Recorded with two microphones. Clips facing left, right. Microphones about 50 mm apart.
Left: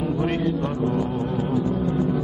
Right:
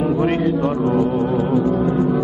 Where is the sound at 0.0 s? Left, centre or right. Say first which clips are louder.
Right 6 dB; right.